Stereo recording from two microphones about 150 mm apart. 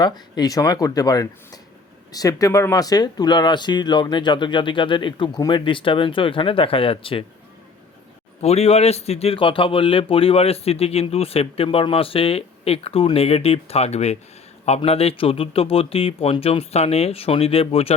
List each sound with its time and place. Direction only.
0.0 s a man's voice: 25° left (ahead or behind)
8.4 s a man's voice: 45° left (ahead or behind)